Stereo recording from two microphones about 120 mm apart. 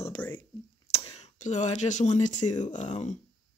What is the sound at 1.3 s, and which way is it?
Speech, 90° left.